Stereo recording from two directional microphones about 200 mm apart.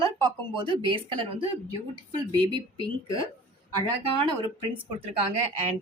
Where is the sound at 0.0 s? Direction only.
25° right (ahead or behind).